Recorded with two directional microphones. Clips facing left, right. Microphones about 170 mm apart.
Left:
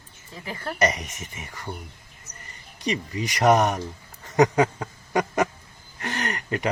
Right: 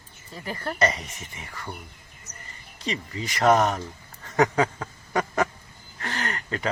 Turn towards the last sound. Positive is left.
turn(degrees=20)  # may be behind; listen again after turning